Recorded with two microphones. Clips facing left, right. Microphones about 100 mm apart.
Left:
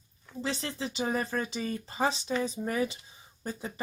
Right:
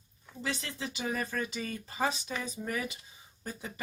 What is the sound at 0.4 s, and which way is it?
Speech, 30° left (ahead or behind).